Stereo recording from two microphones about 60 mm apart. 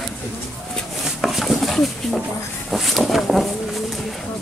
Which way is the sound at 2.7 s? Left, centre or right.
Centre.